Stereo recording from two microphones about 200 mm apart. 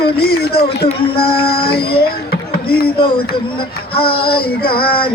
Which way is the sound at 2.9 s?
25° left (ahead or behind).